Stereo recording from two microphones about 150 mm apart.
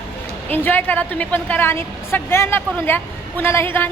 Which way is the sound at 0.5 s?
15° left (ahead or behind).